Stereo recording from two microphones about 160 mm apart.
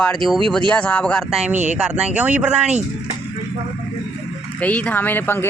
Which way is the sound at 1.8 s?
5° right (ahead or behind).